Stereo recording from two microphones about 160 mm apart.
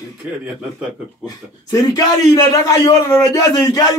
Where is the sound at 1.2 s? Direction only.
20° left (ahead or behind).